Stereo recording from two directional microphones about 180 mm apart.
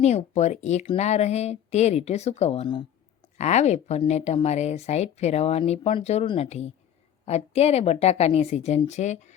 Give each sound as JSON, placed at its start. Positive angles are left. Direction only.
{"t": 0.0, "sound": "a woman's voice", "side_deg": 40}
{"t": 3.3, "sound": "a woman's voice", "side_deg": 40}